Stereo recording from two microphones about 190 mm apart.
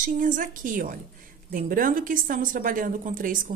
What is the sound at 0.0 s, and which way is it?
A woman's voice, 45° right (ahead or behind).